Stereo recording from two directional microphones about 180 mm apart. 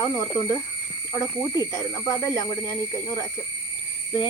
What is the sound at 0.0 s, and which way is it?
Speech, 15° left (ahead or behind).